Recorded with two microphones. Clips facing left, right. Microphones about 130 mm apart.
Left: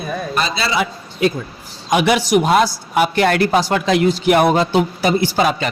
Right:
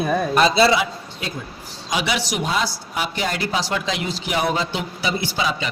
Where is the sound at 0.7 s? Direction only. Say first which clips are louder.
Left 3 dB; 65° left (ahead or behind).